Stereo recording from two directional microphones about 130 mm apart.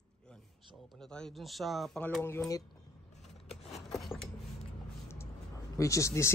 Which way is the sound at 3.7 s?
Centre (ahead or behind).